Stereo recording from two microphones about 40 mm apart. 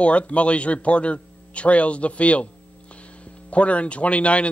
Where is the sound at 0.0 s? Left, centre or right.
Left.